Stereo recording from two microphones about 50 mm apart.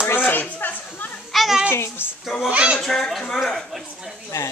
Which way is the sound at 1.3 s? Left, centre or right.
Centre.